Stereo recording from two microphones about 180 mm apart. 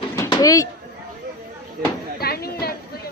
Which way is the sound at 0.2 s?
20° left (ahead or behind).